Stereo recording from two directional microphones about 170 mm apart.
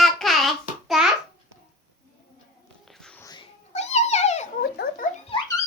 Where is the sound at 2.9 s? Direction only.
5° left (ahead or behind).